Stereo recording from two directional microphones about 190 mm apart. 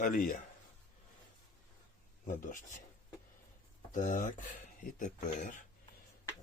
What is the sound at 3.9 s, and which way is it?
Speech, 40° left (ahead or behind).